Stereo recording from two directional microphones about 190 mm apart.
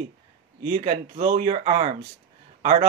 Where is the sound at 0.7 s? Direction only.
40° right (ahead or behind).